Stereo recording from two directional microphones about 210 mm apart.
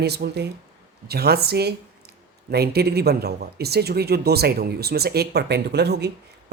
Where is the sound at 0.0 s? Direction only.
50° right (ahead or behind).